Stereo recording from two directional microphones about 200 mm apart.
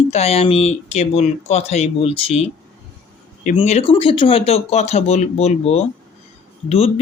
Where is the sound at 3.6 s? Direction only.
30° left (ahead or behind).